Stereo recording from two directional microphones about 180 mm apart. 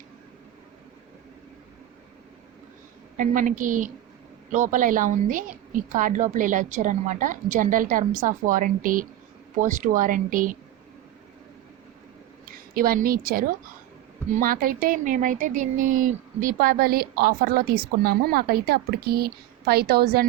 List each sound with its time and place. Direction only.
3.2 s a woman's voice: 45° right (ahead or behind)
12.5 s a woman's voice: 50° right (ahead or behind)